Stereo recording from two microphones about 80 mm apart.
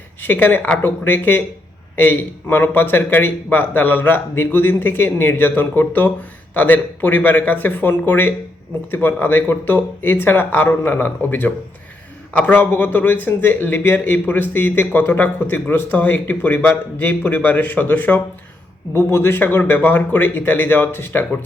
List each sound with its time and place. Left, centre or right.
0.2 s speech: left
18.9 s speech: left